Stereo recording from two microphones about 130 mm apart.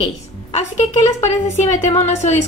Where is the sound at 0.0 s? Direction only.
55° left (ahead or behind).